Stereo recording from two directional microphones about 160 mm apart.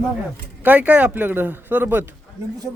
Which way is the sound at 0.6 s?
10° right (ahead or behind).